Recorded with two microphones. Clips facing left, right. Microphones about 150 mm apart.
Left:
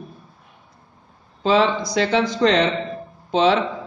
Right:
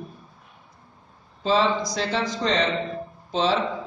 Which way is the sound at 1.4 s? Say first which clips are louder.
Left 4 dB; 65° left (ahead or behind).